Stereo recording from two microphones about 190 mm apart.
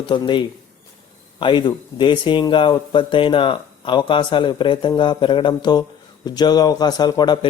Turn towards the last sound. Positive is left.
turn(degrees=20)  # may be behind; listen again after turning